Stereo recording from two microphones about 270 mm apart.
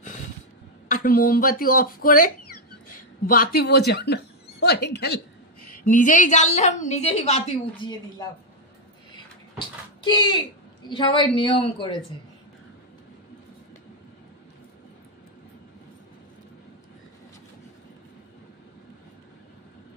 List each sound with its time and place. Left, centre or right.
0.8 s speech: left
2.5 s cough: left
3.3 s a woman's voice: left; by 8.3 s centre
9.1 s a sound: centre
10.8 s a woman's voice: centre